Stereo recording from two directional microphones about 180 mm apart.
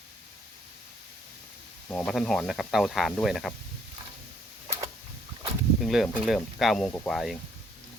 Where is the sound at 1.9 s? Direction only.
Centre (ahead or behind).